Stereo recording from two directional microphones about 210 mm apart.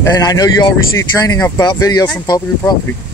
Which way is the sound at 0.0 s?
20° left (ahead or behind).